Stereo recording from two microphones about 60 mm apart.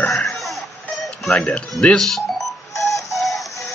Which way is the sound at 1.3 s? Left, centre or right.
Centre.